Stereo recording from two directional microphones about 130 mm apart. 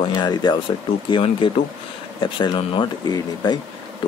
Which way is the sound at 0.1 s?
35° left (ahead or behind).